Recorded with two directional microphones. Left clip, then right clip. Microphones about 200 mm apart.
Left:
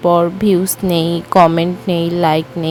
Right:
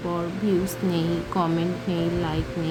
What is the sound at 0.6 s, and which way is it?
Speech, 50° left (ahead or behind).